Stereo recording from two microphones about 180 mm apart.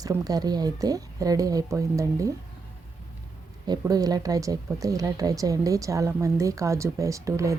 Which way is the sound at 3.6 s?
20° right (ahead or behind).